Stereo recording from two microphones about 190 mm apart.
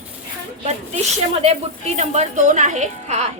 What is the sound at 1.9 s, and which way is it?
A woman's voice, 35° right (ahead or behind).